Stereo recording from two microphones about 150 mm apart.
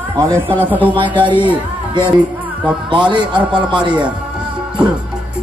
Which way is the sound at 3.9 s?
5° right (ahead or behind).